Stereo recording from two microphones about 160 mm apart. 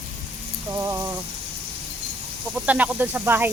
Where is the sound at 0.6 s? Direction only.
20° right (ahead or behind).